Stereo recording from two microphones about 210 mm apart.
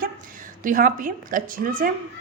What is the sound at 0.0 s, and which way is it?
A woman's voice, 40° right (ahead or behind).